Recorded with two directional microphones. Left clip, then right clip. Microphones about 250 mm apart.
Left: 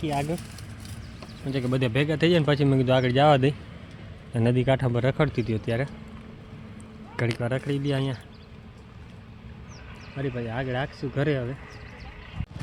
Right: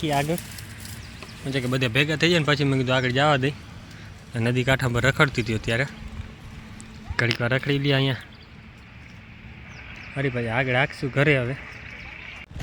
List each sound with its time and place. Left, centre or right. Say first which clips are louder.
0.0 s speech: right 4 dB; centre
1.5 s speech: right 2 dB; centre
7.2 s speech: right 5 dB; centre
10.2 s speech: right 6 dB; right